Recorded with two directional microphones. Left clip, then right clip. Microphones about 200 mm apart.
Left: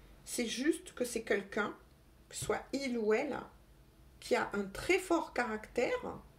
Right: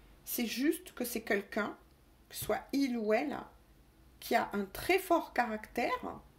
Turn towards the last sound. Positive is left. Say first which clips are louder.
# even
turn(degrees=-35)  # may be behind; listen again after turning